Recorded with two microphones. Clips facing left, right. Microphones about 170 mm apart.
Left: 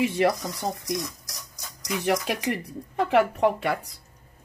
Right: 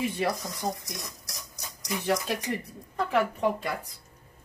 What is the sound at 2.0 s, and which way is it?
Speech, 70° left (ahead or behind).